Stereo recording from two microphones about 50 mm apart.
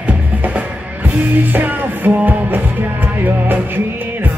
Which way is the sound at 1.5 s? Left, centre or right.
Right.